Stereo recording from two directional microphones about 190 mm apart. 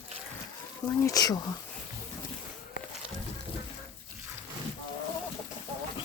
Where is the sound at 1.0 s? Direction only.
20° left (ahead or behind).